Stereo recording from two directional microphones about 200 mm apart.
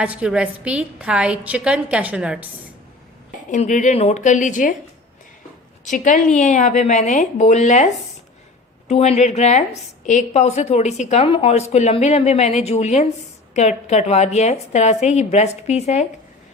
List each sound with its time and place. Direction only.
0.0 s a woman's voice: 5° right (ahead or behind)
3.5 s a woman's voice: 40° left (ahead or behind)
5.8 s a woman's voice: 40° left (ahead or behind)
8.9 s a woman's voice: 30° left (ahead or behind)